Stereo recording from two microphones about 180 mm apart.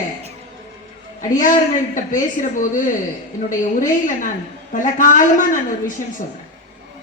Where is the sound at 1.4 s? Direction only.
45° left (ahead or behind).